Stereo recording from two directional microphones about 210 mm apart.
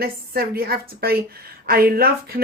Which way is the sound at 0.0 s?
45° right (ahead or behind).